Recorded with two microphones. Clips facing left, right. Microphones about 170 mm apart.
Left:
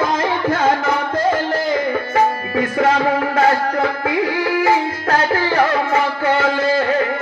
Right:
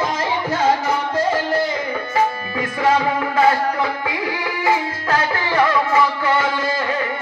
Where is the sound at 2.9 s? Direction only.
70° left (ahead or behind).